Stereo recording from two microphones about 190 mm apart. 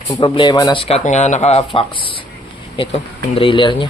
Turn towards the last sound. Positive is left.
turn(degrees=25)  # may be behind; listen again after turning